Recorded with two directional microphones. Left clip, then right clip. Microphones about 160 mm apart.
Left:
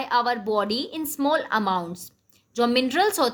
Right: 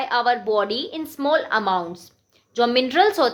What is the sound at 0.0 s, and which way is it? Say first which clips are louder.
Speech: right 3 dB; 40° left (ahead or behind).